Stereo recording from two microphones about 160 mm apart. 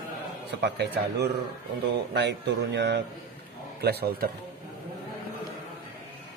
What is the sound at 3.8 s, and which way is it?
Speech, 80° right.